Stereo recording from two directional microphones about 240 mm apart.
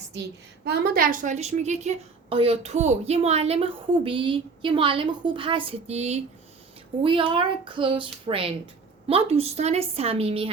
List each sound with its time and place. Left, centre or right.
0.6 s a woman's voice: right